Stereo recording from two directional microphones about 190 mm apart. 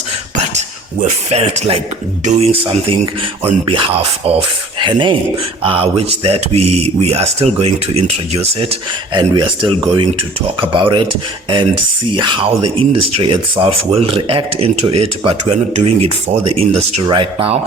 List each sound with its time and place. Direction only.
0.3 s speech: 40° right (ahead or behind)
12.1 s speech: 25° right (ahead or behind)